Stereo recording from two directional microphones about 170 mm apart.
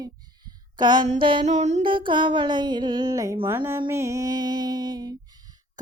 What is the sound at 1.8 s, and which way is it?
Music, 30° right (ahead or behind).